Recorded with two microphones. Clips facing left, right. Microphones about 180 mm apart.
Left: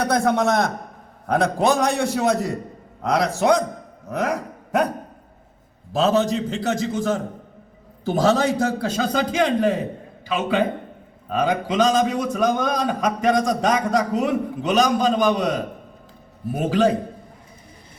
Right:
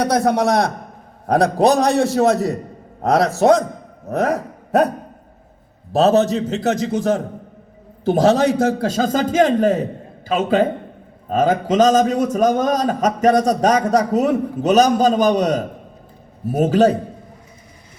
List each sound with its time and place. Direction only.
0.0 s a man's voice: 35° right (ahead or behind)
4.2 s a sound: 40° right (ahead or behind)
5.9 s a man's voice: 40° right (ahead or behind)
8.2 s a man's voice: 40° right (ahead or behind)